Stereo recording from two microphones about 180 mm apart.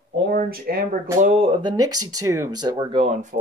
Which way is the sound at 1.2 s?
35° right (ahead or behind).